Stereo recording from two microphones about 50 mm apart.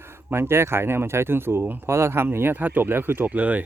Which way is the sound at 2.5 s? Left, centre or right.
Right.